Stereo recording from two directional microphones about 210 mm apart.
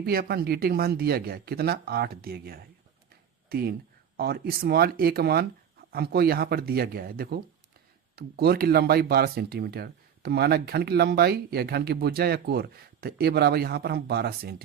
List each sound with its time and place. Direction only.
0.0 s speech: 45° right (ahead or behind)